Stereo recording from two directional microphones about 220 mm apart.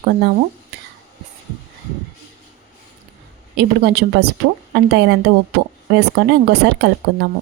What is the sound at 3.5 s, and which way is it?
A woman's voice, 45° right (ahead or behind).